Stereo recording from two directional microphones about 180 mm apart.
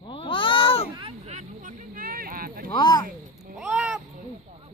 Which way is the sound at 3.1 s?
45° right (ahead or behind).